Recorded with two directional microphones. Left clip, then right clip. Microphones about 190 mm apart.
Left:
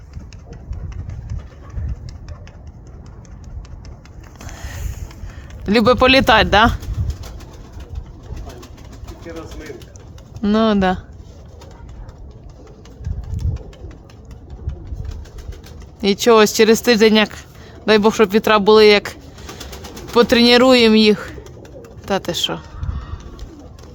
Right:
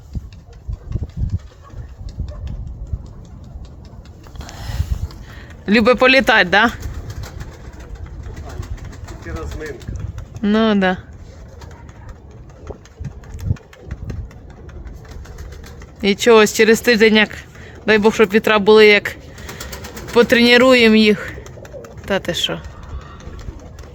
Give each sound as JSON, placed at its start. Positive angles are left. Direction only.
{"t": 4.4, "sound": "sniff", "side_deg": 5}
{"t": 5.6, "sound": "speech", "side_deg": 15}
{"t": 9.2, "sound": "pigeon", "side_deg": -5}
{"t": 10.4, "sound": "speech", "side_deg": 10}
{"t": 13.4, "sound": "pigeon", "side_deg": 0}
{"t": 16.0, "sound": "speech", "side_deg": 15}
{"t": 19.5, "sound": "bird", "side_deg": 0}
{"t": 20.1, "sound": "speech", "side_deg": 10}